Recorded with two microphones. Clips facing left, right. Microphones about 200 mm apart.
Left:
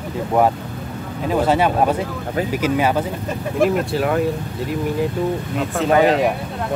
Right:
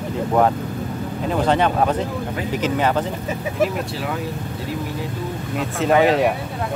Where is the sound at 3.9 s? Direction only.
55° left (ahead or behind).